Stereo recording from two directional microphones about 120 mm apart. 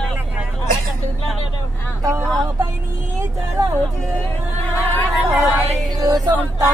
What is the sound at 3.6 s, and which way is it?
Music, 35° right (ahead or behind).